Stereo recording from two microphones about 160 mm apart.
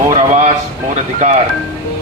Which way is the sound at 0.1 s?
50° right (ahead or behind).